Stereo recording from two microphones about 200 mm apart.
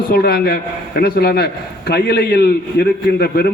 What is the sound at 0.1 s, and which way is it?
A man's voice, 50° left (ahead or behind).